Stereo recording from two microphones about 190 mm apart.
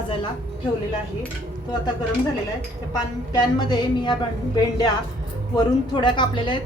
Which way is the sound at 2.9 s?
20° left (ahead or behind).